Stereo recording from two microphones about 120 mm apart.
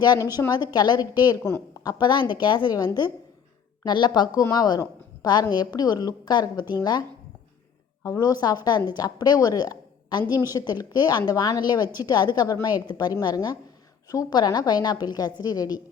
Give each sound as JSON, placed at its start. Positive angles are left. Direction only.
{"t": 0.3, "sound": "a woman's voice", "side_deg": 35}
{"t": 1.4, "sound": "a woman's voice", "side_deg": 20}
{"t": 1.8, "sound": "a woman's voice", "side_deg": 35}
{"t": 8.0, "sound": "a woman's voice", "side_deg": 30}